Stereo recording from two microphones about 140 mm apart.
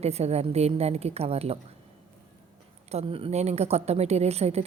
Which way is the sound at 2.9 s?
45° right (ahead or behind).